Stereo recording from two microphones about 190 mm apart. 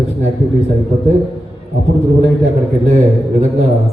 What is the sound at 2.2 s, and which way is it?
A man's voice, 35° right (ahead or behind).